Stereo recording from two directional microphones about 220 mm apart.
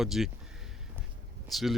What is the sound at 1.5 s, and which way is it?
Speech, centre (ahead or behind).